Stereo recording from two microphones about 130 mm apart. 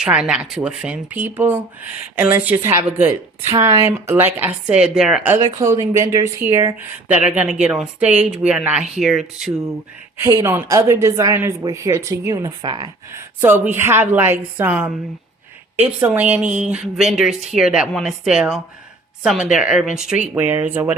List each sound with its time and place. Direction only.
0.0 s speech: 5° right (ahead or behind)
5.5 s speech: 25° right (ahead or behind)
7.3 s speech: 10° right (ahead or behind)
10.2 s speech: 25° right (ahead or behind)
13.1 s speech: 15° right (ahead or behind)
20.2 s speech: 15° right (ahead or behind)